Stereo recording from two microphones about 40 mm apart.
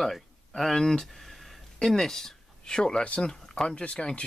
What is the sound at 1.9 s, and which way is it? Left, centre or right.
Speech, centre.